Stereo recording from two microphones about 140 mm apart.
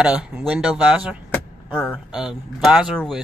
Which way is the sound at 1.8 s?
5° left (ahead or behind).